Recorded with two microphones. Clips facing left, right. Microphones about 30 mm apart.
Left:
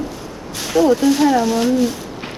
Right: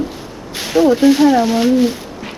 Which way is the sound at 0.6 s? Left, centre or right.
Right.